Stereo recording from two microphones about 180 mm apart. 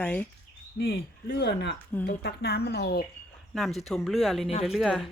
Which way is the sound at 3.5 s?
Centre (ahead or behind).